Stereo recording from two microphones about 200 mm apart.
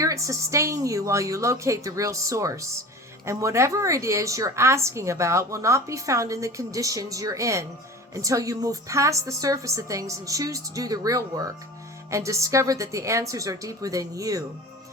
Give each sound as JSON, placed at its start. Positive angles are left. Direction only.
{"t": 0.0, "sound": "a woman's voice", "side_deg": -15}